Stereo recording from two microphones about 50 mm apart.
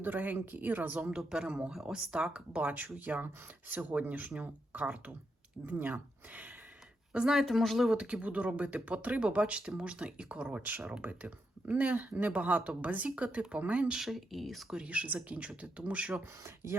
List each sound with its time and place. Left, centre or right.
0.0 s speech: right
1.1 s a man's voice: centre
2.0 s speech: centre
2.6 s speech: right
7.3 s speech: centre
7.9 s speech: right
14.0 s speech: centre
14.8 s speech: right